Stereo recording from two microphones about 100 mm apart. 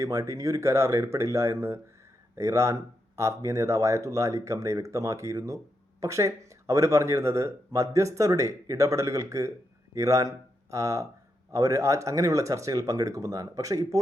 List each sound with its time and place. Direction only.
0.0 s speech: 35° right (ahead or behind)